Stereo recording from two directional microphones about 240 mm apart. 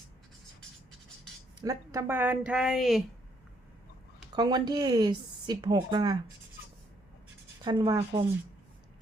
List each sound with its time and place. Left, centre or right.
1.6 s speech: centre
4.3 s speech: centre
7.6 s speech: centre